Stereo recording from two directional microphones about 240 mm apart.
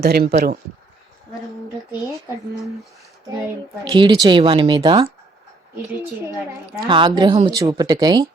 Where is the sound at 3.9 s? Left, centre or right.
Centre.